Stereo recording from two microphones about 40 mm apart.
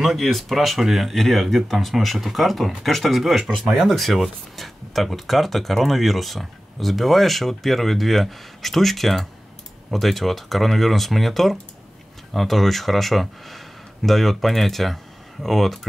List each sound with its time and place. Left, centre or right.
0.0 s speech: centre